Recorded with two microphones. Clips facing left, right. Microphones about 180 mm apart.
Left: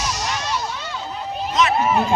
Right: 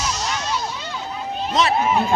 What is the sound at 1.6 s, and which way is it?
Speech, 30° right (ahead or behind).